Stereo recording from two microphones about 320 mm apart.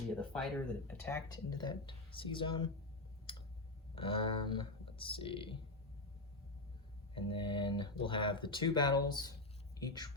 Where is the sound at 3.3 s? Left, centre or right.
Centre.